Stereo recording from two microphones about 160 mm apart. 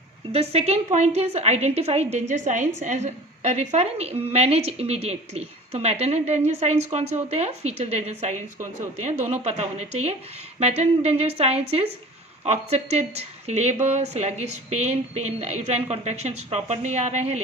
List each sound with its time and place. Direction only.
0.3 s a woman's voice: 40° right (ahead or behind)